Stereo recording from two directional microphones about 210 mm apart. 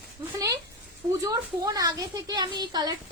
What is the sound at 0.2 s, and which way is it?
A woman's voice, 15° right (ahead or behind).